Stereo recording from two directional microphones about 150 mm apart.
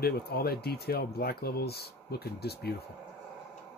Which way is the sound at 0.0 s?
90° left.